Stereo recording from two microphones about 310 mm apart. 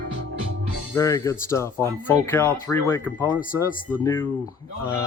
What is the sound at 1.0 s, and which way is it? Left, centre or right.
Speech, centre.